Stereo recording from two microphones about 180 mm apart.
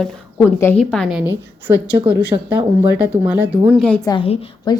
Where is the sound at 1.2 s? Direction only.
10° right (ahead or behind).